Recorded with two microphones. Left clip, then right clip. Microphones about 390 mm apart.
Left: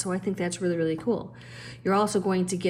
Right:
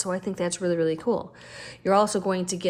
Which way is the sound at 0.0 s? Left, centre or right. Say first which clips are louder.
Right 2 dB; centre.